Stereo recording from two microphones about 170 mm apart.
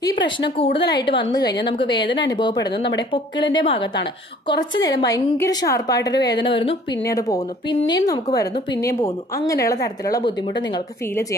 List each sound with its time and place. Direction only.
0.0 s a woman's voice: 25° left (ahead or behind)
7.1 s a woman's voice: 20° left (ahead or behind)